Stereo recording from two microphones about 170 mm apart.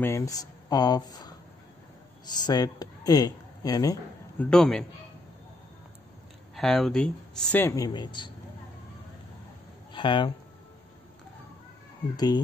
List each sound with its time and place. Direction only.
0.0 s speech: 15° left (ahead or behind)
2.3 s speech: 25° left (ahead or behind)
4.5 s a man's voice: 5° left (ahead or behind)
6.5 s speech: centre (ahead or behind); by 8.3 s 25° left (ahead or behind)
9.9 s speech: 30° left (ahead or behind)